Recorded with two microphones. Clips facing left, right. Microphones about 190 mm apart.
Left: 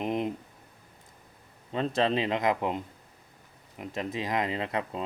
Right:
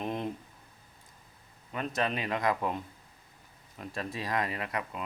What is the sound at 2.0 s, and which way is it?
Speech, 25° left (ahead or behind).